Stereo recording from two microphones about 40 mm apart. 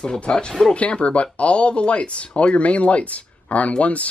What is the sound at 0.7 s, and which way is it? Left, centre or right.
Speech, left.